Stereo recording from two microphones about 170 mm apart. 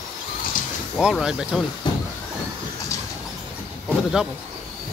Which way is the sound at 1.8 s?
30° left (ahead or behind).